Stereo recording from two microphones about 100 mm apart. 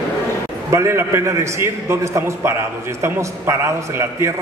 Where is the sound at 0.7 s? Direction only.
30° right (ahead or behind).